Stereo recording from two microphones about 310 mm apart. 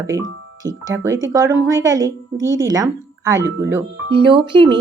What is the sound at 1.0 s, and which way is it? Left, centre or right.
A woman's voice, centre.